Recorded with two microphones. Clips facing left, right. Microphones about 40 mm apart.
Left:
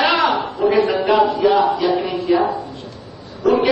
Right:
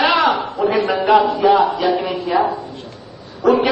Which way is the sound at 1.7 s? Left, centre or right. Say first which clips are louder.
Even; right.